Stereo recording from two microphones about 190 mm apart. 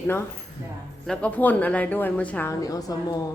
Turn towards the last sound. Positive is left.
turn(degrees=20)  # may be behind; listen again after turning